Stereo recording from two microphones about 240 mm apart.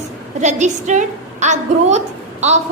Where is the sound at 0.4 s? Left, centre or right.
Right.